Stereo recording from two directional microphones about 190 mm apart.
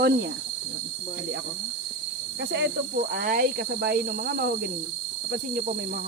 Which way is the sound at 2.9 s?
50° right (ahead or behind).